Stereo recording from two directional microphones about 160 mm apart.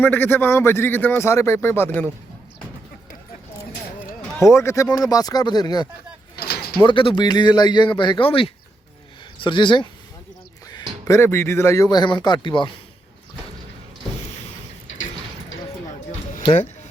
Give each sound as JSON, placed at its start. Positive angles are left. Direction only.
{"t": 0.0, "sound": "speech", "side_deg": 10}
{"t": 4.4, "sound": "speech", "side_deg": 15}
{"t": 6.3, "sound": "a sound", "side_deg": 85}
{"t": 6.8, "sound": "speech", "side_deg": 30}
{"t": 11.0, "sound": "speech", "side_deg": 20}